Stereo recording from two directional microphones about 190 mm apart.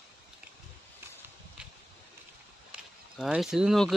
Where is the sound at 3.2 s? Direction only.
Centre (ahead or behind).